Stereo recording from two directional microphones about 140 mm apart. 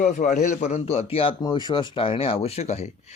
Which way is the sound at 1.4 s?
30° left (ahead or behind).